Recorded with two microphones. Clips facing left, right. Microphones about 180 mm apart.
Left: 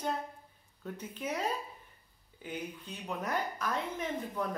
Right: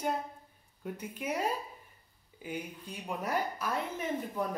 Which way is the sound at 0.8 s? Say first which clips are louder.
Right 1 dB; 10° right (ahead or behind).